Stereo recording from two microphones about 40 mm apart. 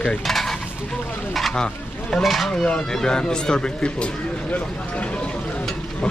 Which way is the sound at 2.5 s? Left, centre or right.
Left.